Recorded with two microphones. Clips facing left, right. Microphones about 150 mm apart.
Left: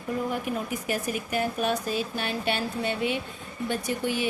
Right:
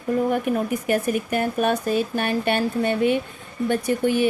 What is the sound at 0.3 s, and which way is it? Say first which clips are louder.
Speech: right 7 dB; 55° right (ahead or behind).